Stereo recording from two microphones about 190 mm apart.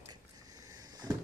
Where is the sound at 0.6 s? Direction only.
20° right (ahead or behind).